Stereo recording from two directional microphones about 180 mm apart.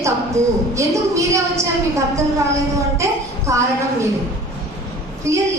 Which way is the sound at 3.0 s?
15° right (ahead or behind).